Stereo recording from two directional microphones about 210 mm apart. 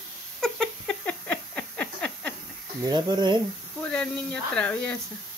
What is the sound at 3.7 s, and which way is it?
Speech, 5° left (ahead or behind).